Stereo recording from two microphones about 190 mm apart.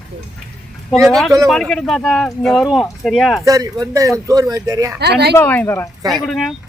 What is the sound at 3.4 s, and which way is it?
Speech, 20° right (ahead or behind).